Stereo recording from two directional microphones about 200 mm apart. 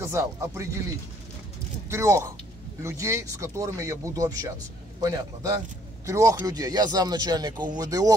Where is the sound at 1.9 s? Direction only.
15° right (ahead or behind).